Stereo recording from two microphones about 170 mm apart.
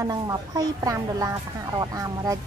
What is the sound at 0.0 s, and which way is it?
Speech, 20° right (ahead or behind).